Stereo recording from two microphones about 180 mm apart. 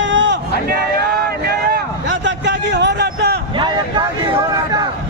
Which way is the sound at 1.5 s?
75° right (ahead or behind).